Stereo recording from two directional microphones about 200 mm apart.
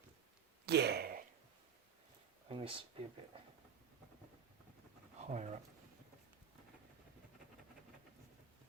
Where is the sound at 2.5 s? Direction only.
30° right (ahead or behind).